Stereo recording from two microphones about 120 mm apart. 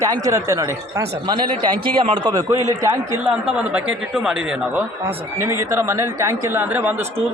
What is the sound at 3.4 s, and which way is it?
A man's voice, 10° right (ahead or behind).